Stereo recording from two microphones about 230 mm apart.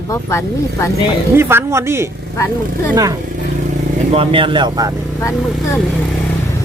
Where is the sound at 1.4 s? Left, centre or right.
Centre.